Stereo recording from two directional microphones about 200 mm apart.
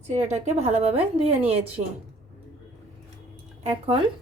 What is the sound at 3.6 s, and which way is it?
Speech, 30° right (ahead or behind).